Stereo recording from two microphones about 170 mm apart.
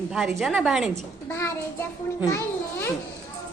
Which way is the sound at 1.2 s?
15° left (ahead or behind).